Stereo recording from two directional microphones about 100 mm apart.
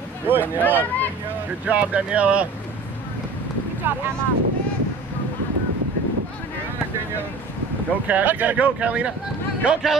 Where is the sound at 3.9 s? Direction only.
20° right (ahead or behind).